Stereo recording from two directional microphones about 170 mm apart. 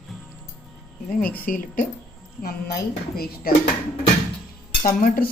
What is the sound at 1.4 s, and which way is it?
Speech, 55° left (ahead or behind).